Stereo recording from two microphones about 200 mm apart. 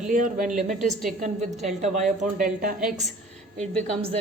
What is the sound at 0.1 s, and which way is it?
Speech, 40° right (ahead or behind).